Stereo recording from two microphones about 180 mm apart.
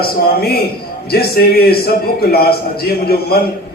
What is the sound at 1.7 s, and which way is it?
Speech, 60° left (ahead or behind).